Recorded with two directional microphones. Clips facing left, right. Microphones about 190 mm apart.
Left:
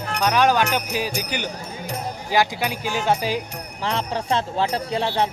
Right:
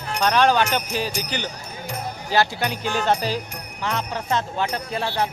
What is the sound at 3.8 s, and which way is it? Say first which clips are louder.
Speech: left 2 dB; 30° left (ahead or behind).